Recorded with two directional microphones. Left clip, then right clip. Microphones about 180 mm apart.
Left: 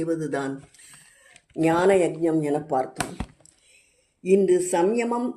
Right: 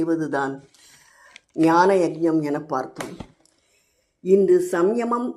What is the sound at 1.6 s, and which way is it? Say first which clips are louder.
Speech: right 3 dB; 5° right (ahead or behind).